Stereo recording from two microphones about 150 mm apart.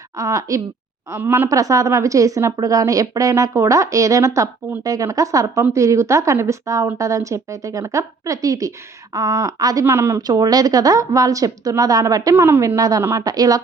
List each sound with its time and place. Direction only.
0.2 s speech: 20° right (ahead or behind)